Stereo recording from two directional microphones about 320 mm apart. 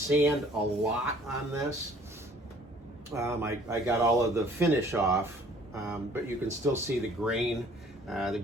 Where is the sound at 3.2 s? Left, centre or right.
Centre.